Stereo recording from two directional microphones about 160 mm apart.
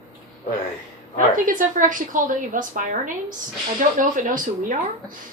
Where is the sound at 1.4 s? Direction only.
55° right (ahead or behind).